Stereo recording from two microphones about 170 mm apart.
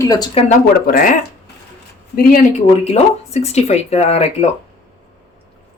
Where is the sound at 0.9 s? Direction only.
55° left (ahead or behind).